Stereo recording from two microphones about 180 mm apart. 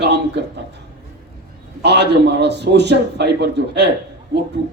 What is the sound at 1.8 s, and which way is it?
A man's voice, 70° right (ahead or behind).